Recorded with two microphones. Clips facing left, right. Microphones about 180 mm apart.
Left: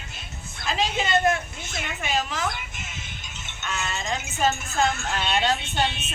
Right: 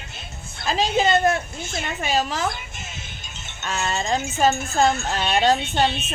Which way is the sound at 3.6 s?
35° right (ahead or behind).